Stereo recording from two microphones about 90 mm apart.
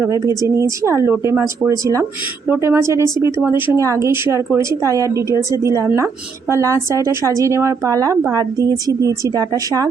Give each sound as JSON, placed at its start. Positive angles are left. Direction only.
{"t": 0.0, "sound": "speech", "side_deg": -35}
{"t": 3.8, "sound": "speech", "side_deg": -35}